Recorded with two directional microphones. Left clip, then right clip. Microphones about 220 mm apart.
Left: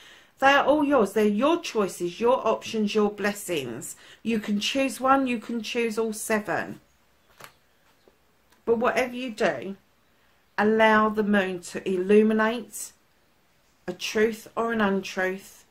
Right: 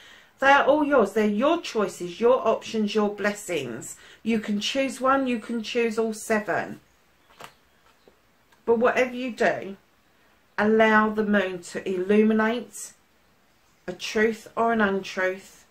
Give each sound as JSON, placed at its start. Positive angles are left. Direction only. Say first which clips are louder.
{"t": 0.4, "sound": "speech", "louder": "right 1 dB", "side_deg": 45}
{"t": 8.8, "sound": "speech", "louder": "right 3 dB", "side_deg": 45}
{"t": 13.8, "sound": "speech", "louder": "right 1 dB", "side_deg": 45}